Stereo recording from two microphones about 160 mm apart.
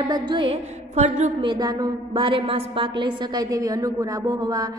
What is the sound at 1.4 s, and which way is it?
A woman's voice, 30° right (ahead or behind).